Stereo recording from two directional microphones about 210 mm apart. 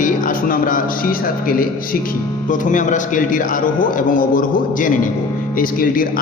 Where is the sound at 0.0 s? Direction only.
40° left (ahead or behind).